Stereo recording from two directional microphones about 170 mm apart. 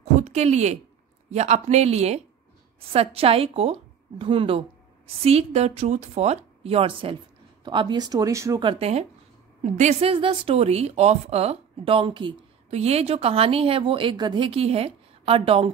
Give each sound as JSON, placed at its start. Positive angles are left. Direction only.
{"t": 0.0, "sound": "a sound", "side_deg": -40}
{"t": 1.3, "sound": "a woman's voice", "side_deg": -40}
{"t": 8.6, "sound": "a woman's voice", "side_deg": -35}
{"t": 12.6, "sound": "a woman's voice", "side_deg": -40}